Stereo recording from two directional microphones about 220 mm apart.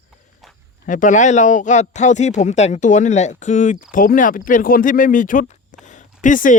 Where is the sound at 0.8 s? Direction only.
35° left (ahead or behind).